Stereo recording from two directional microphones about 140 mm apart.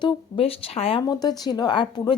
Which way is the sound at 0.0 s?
45° left (ahead or behind).